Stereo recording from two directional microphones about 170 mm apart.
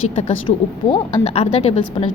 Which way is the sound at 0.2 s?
30° left (ahead or behind).